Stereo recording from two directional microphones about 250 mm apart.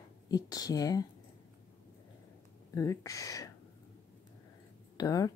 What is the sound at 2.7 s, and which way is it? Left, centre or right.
Speech, centre.